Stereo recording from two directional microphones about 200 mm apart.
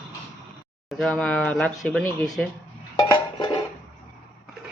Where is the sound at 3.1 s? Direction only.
20° left (ahead or behind).